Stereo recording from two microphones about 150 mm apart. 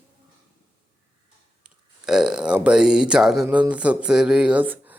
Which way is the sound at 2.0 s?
5° right (ahead or behind).